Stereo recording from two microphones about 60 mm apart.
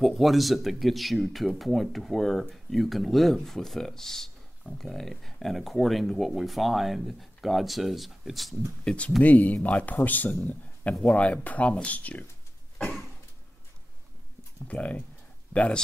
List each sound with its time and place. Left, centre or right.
0.0 s speech: centre
8.8 s speech: left
14.7 s speech: left